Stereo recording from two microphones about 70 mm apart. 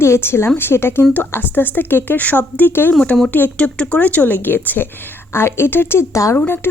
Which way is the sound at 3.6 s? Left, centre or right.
Centre.